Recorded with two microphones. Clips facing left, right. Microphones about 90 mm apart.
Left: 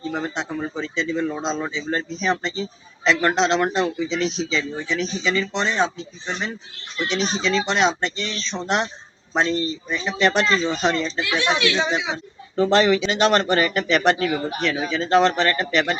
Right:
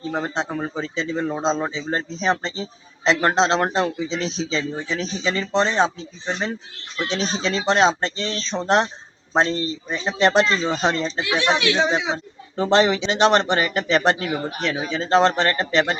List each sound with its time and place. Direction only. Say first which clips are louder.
0.1 s a man's voice: right 3 dB; 35° right (ahead or behind)
12.6 s speech: even; 25° right (ahead or behind)